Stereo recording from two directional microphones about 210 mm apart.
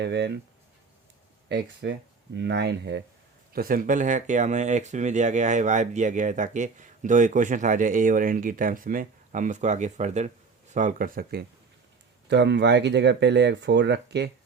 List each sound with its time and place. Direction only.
0.0 s speech: 55° right (ahead or behind)
1.5 s speech: 55° right (ahead or behind)
3.5 s speech: 45° right (ahead or behind)